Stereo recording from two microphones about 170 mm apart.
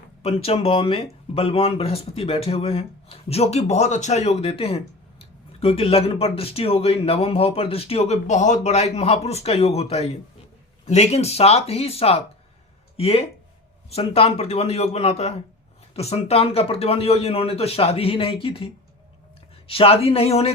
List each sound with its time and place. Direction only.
0.2 s speech: 35° left (ahead or behind)